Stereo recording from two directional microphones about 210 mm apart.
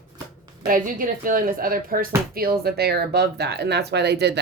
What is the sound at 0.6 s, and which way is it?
A woman's voice, 40° right (ahead or behind).